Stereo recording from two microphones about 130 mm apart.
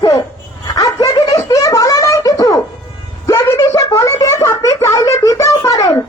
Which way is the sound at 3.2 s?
25° left (ahead or behind).